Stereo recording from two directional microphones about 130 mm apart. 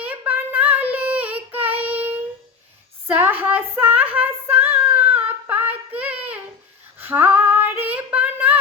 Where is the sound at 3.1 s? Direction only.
15° right (ahead or behind).